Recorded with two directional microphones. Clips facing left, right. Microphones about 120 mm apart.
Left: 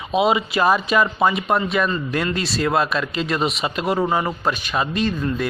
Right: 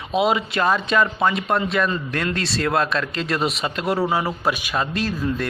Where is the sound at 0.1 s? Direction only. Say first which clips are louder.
Left 2 dB; centre (ahead or behind).